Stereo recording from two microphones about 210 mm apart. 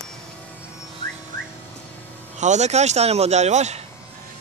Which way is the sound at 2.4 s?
35° right (ahead or behind).